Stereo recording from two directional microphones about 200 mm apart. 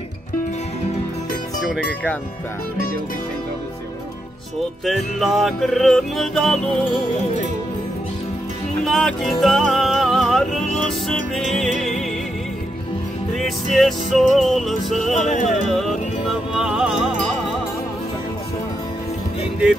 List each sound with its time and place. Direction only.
1.6 s speech: centre (ahead or behind)
4.8 s music: centre (ahead or behind)
8.8 s music: centre (ahead or behind)
13.7 s music: centre (ahead or behind)
15.1 s music: 35° left (ahead or behind)
16.3 s music: 5° right (ahead or behind)